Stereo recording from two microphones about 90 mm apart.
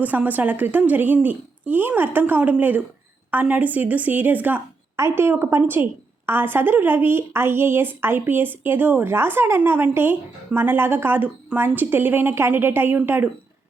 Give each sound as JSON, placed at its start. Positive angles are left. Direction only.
{"t": 0.0, "sound": "a woman's voice", "side_deg": -20}
{"t": 4.9, "sound": "a woman's voice", "side_deg": -30}